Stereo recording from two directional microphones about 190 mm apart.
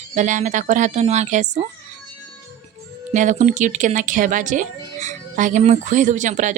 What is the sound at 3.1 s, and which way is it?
Speech, 40° right (ahead or behind).